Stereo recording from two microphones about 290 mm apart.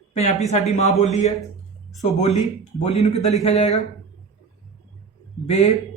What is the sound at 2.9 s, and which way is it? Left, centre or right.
Speech, left.